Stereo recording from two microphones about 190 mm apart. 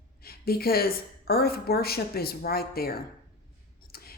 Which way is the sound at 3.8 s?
55° left (ahead or behind).